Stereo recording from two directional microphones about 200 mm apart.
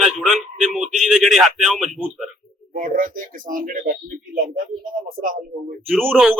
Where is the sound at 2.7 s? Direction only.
45° right (ahead or behind).